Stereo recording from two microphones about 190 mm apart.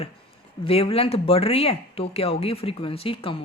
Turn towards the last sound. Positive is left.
turn(degrees=30)  # may be behind; listen again after turning